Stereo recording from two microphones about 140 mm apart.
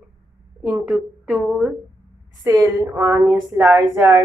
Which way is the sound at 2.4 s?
25° right (ahead or behind).